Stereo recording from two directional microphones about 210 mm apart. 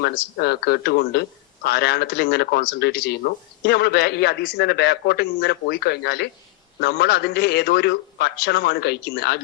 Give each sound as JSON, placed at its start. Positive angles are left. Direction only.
{"t": 0.0, "sound": "speech", "side_deg": 50}